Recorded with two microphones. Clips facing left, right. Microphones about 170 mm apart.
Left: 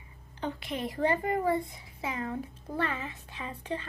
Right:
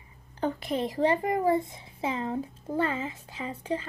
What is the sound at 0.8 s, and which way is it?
A child's voice, 20° right (ahead or behind).